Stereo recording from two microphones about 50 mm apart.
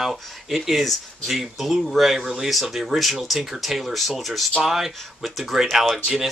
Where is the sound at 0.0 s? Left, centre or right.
Centre.